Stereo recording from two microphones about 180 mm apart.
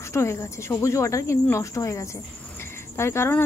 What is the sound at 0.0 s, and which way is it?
Speech, 15° left (ahead or behind).